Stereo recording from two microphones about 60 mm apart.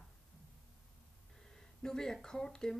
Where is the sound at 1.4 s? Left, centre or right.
Centre.